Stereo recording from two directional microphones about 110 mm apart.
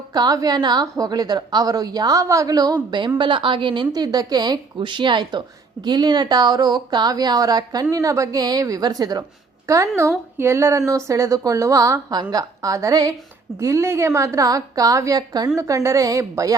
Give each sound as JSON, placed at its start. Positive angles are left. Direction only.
{"t": 0.1, "sound": "speech", "side_deg": -35}
{"t": 3.2, "sound": "a woman's voice", "side_deg": -50}